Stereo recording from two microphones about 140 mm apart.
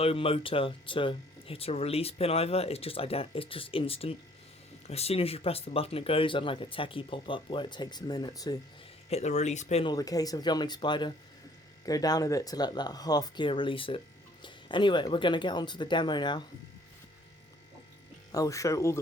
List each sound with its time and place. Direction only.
0.0 s speech: 45° left (ahead or behind)
9.0 s speech: 50° left (ahead or behind)
9.8 s speech: 25° left (ahead or behind)
18.3 s speech: 25° left (ahead or behind)